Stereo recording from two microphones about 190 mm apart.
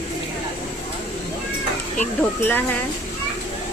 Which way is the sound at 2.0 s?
10° left (ahead or behind).